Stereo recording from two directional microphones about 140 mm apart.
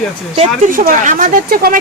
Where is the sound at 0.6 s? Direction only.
75° right (ahead or behind).